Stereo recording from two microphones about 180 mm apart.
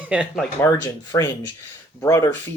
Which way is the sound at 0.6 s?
15° left (ahead or behind).